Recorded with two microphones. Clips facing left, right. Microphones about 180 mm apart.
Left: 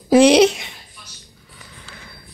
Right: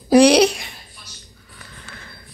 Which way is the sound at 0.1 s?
20° left (ahead or behind).